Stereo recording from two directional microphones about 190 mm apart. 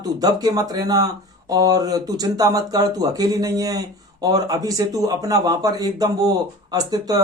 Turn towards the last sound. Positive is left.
turn(degrees=-20)  # may be behind; listen again after turning